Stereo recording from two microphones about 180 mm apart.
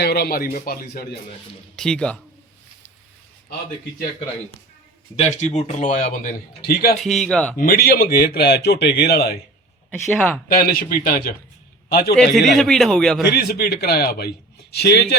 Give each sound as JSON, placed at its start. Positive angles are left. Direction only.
{"t": 0.0, "sound": "a man's voice", "side_deg": 60}
{"t": 1.7, "sound": "a man's voice", "side_deg": 5}
{"t": 5.1, "sound": "speech", "side_deg": 35}
{"t": 6.9, "sound": "a man's voice", "side_deg": 0}
{"t": 7.6, "sound": "a man's voice", "side_deg": 55}
{"t": 10.2, "sound": "a man's voice", "side_deg": 5}
{"t": 10.5, "sound": "a man's voice", "side_deg": 55}
{"t": 12.1, "sound": "a man's voice", "side_deg": 0}
{"t": 13.3, "sound": "a man's voice", "side_deg": 60}